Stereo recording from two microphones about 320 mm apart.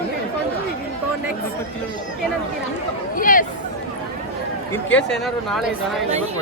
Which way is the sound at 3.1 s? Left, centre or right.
Left.